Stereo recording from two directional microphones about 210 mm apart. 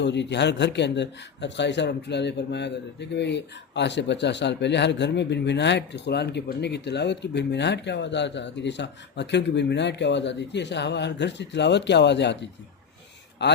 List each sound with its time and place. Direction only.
0.0 s speech: 55° left (ahead or behind)